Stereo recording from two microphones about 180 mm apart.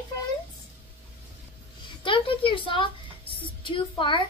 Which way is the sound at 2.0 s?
30° left (ahead or behind).